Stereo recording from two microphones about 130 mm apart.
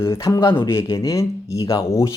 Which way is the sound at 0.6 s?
40° left (ahead or behind).